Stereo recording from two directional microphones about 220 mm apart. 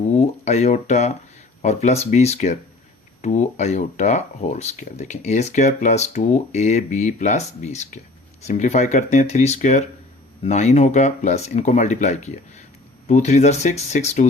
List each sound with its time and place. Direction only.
0.1 s speech: 30° left (ahead or behind)